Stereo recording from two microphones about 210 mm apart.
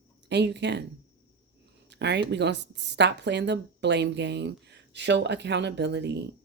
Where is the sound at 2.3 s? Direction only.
55° right (ahead or behind).